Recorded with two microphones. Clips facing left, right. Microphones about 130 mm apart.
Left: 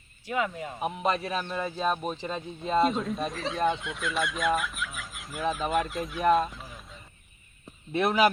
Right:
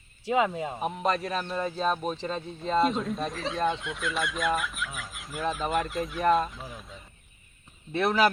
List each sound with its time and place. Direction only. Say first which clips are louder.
0.3 s speech: right 5 dB; 25° right (ahead or behind)
0.8 s speech: left 1 dB; 5° left (ahead or behind)
7.9 s speech: left 1 dB; 10° left (ahead or behind)